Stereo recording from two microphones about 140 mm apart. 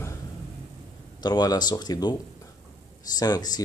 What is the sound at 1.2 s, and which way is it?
Speech, 30° left (ahead or behind).